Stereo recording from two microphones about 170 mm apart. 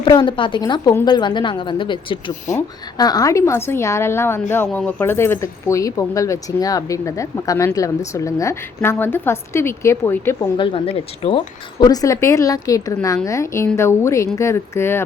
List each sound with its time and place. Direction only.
0.0 s a woman's voice: 30° left (ahead or behind)
10.6 s a woman's voice: 30° left (ahead or behind); by 15.0 s 15° left (ahead or behind)